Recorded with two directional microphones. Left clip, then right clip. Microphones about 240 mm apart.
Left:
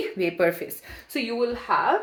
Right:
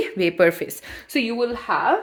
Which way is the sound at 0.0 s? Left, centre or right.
Right.